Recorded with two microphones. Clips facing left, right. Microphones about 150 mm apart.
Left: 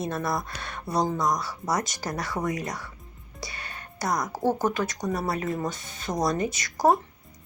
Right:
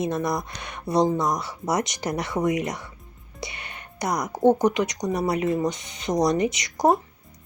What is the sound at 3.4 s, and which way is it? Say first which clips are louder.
Music: right 2 dB; 20° right (ahead or behind).